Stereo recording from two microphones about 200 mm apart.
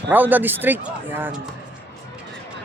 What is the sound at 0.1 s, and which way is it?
Speech, 10° right (ahead or behind).